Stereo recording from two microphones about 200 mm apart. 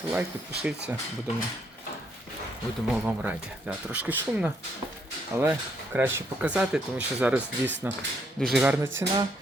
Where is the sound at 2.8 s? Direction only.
5° right (ahead or behind).